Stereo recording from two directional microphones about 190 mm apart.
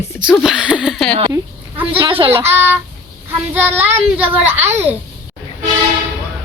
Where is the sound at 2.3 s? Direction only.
10° right (ahead or behind).